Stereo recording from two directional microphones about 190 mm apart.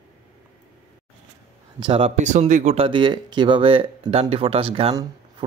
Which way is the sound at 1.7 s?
25° right (ahead or behind).